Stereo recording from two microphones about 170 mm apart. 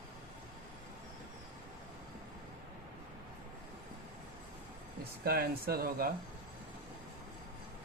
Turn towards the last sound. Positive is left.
turn(degrees=-60)  # may be behind; listen again after turning